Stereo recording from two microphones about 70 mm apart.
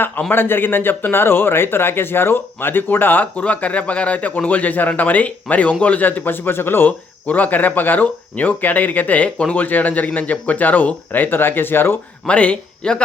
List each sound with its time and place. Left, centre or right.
0.2 s speech: left
12.3 s speech: centre